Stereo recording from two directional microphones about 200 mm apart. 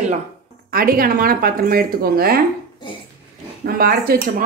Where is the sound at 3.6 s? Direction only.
50° right (ahead or behind).